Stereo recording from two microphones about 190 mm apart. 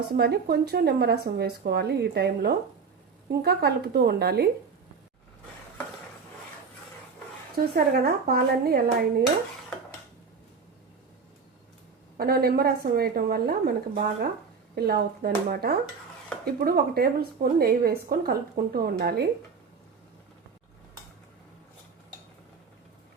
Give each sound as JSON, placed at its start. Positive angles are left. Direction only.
{"t": 0.0, "sound": "speech", "side_deg": -55}
{"t": 7.6, "sound": "a woman's voice", "side_deg": -55}
{"t": 12.1, "sound": "a woman's voice", "side_deg": -55}